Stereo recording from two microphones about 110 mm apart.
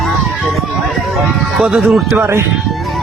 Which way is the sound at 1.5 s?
Centre (ahead or behind).